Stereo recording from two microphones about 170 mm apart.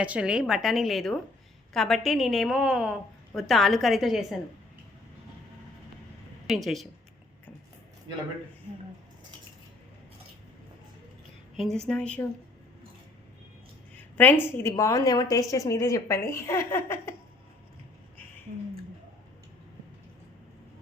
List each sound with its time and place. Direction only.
0.0 s a woman's voice: 5° right (ahead or behind)
6.5 s a woman's voice: centre (ahead or behind)
11.5 s a woman's voice: centre (ahead or behind)
13.9 s a woman's voice: 10° left (ahead or behind)